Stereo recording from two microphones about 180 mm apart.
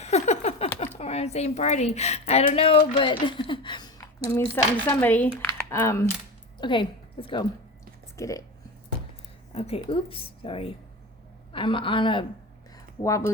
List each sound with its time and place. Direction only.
0.0 s a sound: 35° left (ahead or behind)
0.9 s speech: 35° left (ahead or behind); by 6.1 s 15° left (ahead or behind)
6.6 s a woman's voice: 25° left (ahead or behind)
9.6 s a man's voice: 35° left (ahead or behind)
13.0 s speech: 15° left (ahead or behind)